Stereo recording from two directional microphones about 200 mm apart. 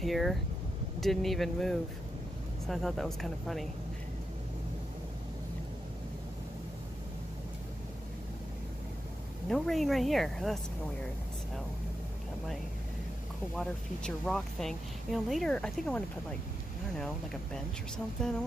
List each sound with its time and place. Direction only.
0.0 s speech: centre (ahead or behind)
9.5 s speech: centre (ahead or behind)
13.6 s speech: 5° left (ahead or behind)
18.2 s speech: 5° left (ahead or behind)